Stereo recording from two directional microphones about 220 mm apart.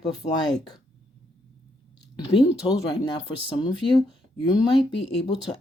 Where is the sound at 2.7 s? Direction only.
20° left (ahead or behind).